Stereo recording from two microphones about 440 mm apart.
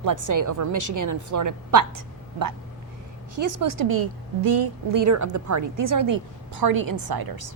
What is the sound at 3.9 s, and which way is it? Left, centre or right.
A woman's voice, right.